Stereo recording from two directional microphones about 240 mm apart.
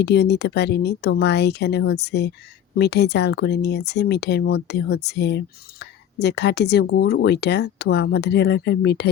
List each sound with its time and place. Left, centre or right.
0.0 s speech: left